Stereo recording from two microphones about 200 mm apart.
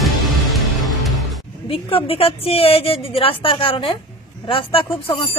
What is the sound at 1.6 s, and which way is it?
Speech, 25° left (ahead or behind).